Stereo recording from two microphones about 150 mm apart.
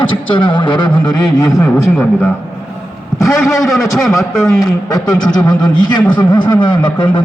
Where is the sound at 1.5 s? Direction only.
5° left (ahead or behind).